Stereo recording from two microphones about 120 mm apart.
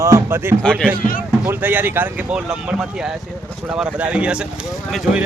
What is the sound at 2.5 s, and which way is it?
Speech, 5° right (ahead or behind).